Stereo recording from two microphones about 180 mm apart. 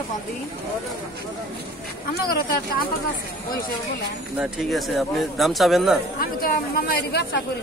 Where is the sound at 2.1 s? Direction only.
55° left (ahead or behind).